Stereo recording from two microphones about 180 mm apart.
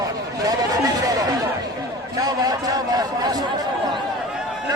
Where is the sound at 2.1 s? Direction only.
20° right (ahead or behind).